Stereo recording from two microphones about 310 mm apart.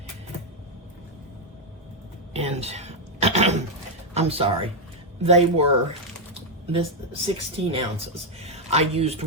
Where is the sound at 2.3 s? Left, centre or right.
Centre.